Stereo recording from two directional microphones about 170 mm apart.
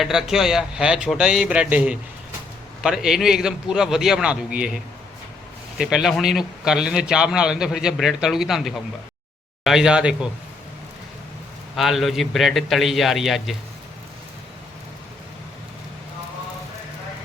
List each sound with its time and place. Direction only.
0.0 s speech: centre (ahead or behind)
11.8 s speech: centre (ahead or behind)